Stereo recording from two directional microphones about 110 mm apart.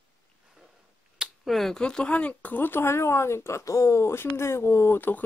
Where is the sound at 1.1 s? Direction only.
5° right (ahead or behind).